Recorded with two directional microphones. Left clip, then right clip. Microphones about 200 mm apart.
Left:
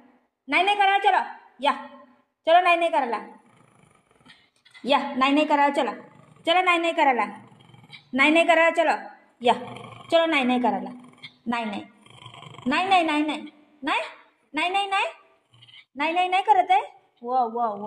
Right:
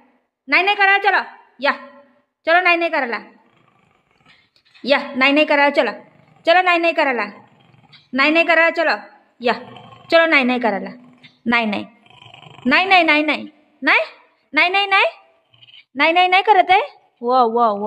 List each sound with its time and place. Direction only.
0.5 s a woman's voice: 30° right (ahead or behind)
4.8 s a woman's voice: 35° right (ahead or behind)
12.2 s dog: 5° right (ahead or behind)
12.6 s a woman's voice: 40° right (ahead or behind)
14.5 s a woman's voice: 40° right (ahead or behind)